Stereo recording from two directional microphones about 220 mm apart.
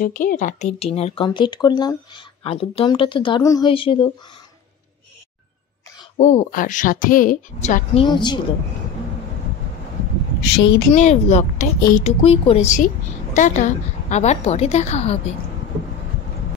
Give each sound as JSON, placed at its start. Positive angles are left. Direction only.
{"t": 0.0, "sound": "speech", "side_deg": 40}
{"t": 6.1, "sound": "a woman's voice", "side_deg": 35}
{"t": 10.4, "sound": "speech", "side_deg": 55}
{"t": 10.9, "sound": "a woman's voice", "side_deg": 30}